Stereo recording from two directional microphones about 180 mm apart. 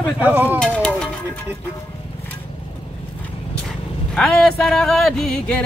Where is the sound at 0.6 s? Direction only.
5° left (ahead or behind).